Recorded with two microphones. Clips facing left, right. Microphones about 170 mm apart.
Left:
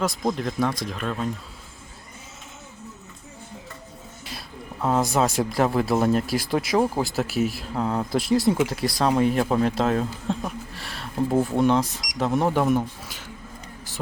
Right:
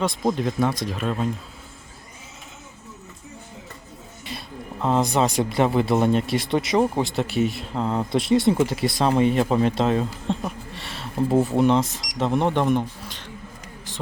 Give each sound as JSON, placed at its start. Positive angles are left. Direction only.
{"t": 0.0, "sound": "speech", "side_deg": 0}
{"t": 4.2, "sound": "speech", "side_deg": 0}